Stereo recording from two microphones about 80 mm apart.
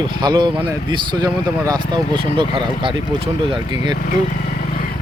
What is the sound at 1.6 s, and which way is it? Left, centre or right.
Speech, right.